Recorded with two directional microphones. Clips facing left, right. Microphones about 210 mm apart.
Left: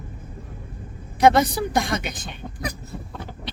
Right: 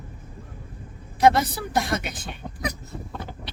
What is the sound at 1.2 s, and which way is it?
A woman's voice, 5° right (ahead or behind).